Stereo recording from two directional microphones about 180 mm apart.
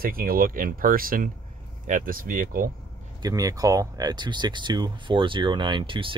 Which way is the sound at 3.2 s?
20° right (ahead or behind).